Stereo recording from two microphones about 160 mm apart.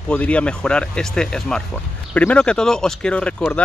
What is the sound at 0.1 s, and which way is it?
Speech, 10° left (ahead or behind).